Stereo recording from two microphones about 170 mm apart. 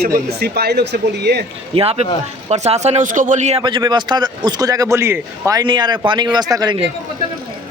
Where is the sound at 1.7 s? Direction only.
35° right (ahead or behind).